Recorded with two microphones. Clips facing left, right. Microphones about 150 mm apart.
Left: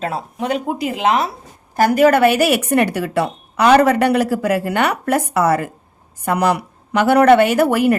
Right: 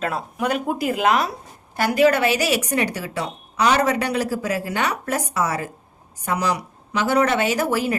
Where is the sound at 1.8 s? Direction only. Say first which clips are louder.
Left 5 dB; 50° left (ahead or behind).